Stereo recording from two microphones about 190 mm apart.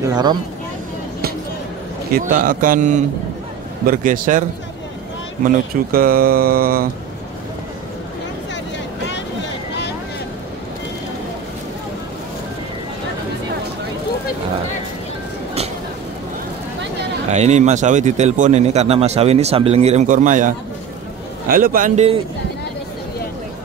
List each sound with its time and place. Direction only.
0.0 s speech: 20° right (ahead or behind)
2.1 s speech: 45° right (ahead or behind)
17.3 s a man's voice: 35° right (ahead or behind)